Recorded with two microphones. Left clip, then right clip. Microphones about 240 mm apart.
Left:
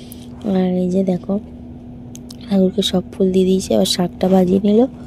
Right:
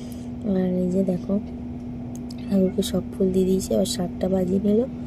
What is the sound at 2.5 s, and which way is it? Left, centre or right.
A woman's voice, left.